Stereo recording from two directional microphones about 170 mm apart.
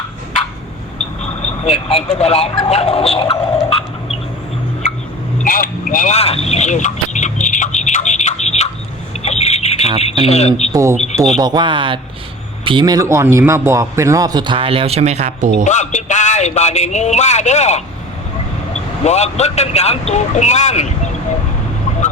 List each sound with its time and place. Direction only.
1.6 s speech: 35° left (ahead or behind)
2.6 s a sound: 40° left (ahead or behind)
5.5 s vehicle: 55° left (ahead or behind)
9.2 s squawk: 40° left (ahead or behind)
10.2 s speech: 40° left (ahead or behind)
10.7 s a man's voice: 20° right (ahead or behind); by 15.6 s 45° right (ahead or behind)
15.6 s speech: 45° left (ahead or behind)
19.0 s speech: 40° left (ahead or behind)